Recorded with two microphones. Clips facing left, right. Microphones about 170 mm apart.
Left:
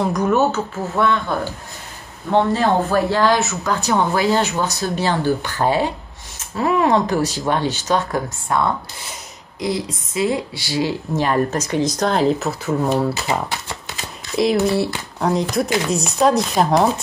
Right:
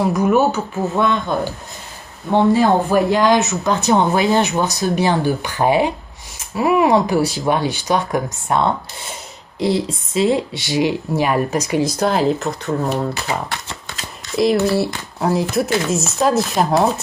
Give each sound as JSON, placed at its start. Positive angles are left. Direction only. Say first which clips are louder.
{"t": 0.0, "sound": "speech", "louder": "right 2 dB", "side_deg": -10}
{"t": 14.3, "sound": "speech", "louder": "right 1 dB", "side_deg": 0}